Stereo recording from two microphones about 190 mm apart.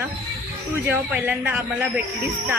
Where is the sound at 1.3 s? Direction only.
10° right (ahead or behind).